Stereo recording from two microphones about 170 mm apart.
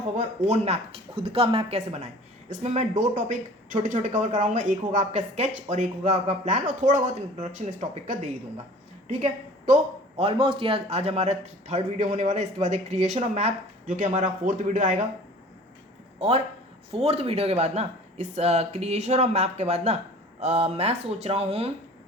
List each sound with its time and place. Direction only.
0.2 s speech: 40° right (ahead or behind)
16.9 s speech: 35° right (ahead or behind)